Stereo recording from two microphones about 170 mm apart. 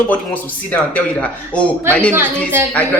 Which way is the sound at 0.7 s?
5° left (ahead or behind).